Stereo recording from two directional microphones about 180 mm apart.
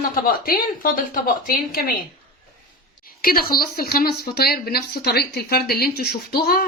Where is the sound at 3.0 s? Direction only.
55° left (ahead or behind).